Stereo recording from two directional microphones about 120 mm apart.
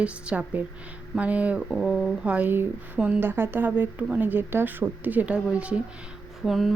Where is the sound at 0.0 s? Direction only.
10° right (ahead or behind).